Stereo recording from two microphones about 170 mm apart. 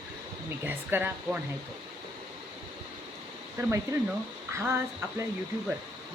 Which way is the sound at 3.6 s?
15° right (ahead or behind).